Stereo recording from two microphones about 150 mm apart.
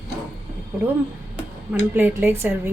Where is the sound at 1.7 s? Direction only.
15° right (ahead or behind).